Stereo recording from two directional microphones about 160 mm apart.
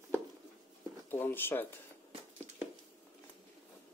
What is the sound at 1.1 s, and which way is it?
Speech, 15° left (ahead or behind).